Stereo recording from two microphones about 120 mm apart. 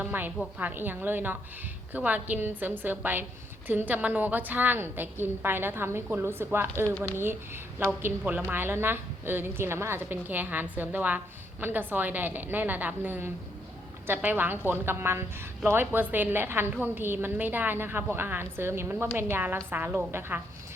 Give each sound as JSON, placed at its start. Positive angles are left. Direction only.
{"t": 0.0, "sound": "a woman's voice", "side_deg": -15}
{"t": 6.8, "sound": "speech", "side_deg": 10}
{"t": 7.2, "sound": "a woman's voice", "side_deg": -20}